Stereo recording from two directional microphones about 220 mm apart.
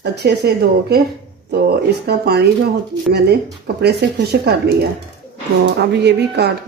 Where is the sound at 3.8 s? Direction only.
45° right (ahead or behind).